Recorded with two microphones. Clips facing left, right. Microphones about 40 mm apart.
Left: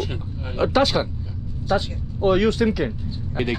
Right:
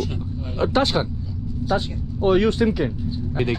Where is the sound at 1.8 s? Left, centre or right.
Left.